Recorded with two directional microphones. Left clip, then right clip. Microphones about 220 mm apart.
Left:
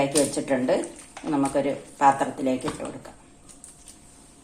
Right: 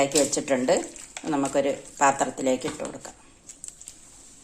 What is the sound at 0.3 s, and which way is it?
Speech, 35° right (ahead or behind).